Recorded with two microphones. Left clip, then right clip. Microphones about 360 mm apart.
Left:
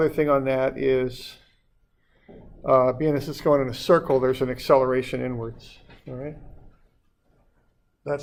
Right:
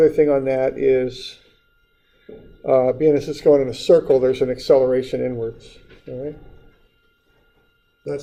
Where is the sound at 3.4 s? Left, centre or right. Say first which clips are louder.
Right 5 dB; left.